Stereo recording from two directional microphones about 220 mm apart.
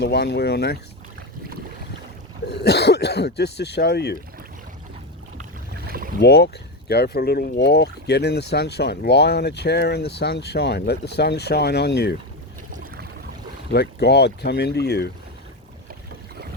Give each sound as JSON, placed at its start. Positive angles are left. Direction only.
{"t": 0.0, "sound": "speech", "side_deg": 50}
{"t": 2.5, "sound": "speech", "side_deg": 50}
{"t": 5.7, "sound": "boat", "side_deg": -45}
{"t": 6.1, "sound": "speech", "side_deg": 50}
{"t": 12.7, "sound": "boat", "side_deg": -40}
{"t": 13.7, "sound": "speech", "side_deg": 50}